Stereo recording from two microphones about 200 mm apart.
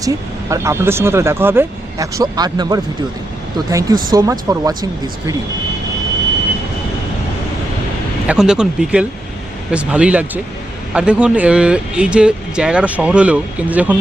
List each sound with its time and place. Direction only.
0.0 s speech: 15° right (ahead or behind)
8.3 s speech: 5° right (ahead or behind)